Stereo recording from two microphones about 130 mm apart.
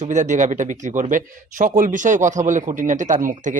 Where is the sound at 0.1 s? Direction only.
70° right (ahead or behind).